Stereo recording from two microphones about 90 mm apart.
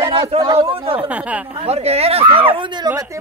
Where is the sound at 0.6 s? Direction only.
80° right.